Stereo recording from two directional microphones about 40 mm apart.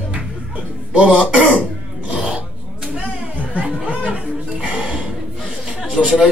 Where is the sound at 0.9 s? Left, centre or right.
Right.